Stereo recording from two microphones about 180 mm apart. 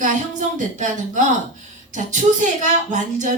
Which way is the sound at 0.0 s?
45° right (ahead or behind).